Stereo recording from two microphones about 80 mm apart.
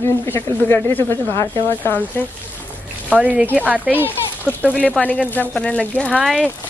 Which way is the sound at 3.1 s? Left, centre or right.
Centre.